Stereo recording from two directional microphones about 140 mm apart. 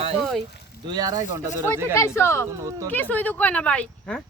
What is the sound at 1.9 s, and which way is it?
Speech, 20° left (ahead or behind).